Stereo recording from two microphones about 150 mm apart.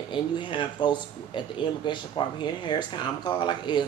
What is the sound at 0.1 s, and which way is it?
Speech, 35° left (ahead or behind).